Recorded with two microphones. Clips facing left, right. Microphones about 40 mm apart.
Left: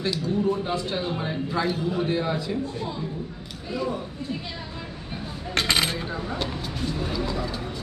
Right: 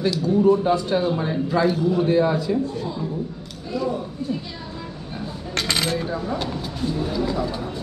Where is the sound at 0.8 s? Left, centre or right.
Centre.